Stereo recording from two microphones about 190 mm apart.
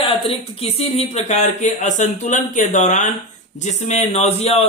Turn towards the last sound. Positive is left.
turn(degrees=35)  # may be behind; listen again after turning